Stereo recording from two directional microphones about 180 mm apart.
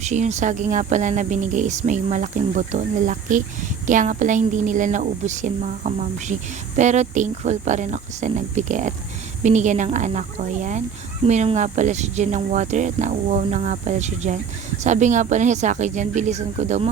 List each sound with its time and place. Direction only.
0.0 s speech: 40° right (ahead or behind)